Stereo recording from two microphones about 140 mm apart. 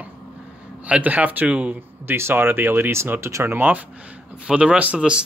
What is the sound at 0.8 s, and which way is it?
Speech, 10° right (ahead or behind).